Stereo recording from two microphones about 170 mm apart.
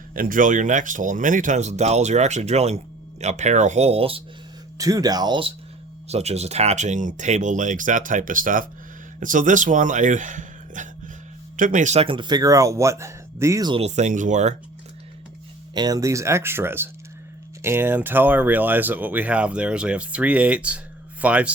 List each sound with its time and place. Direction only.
0.1 s speech: 55° right (ahead or behind); by 4.2 s 35° right (ahead or behind)
4.8 s speech: 20° right (ahead or behind); by 12.0 s 45° right (ahead or behind)
12.0 s speech: 30° right (ahead or behind)
13.8 s speech: 40° right (ahead or behind)
15.7 s speech: 25° right (ahead or behind); by 21.5 s 10° right (ahead or behind)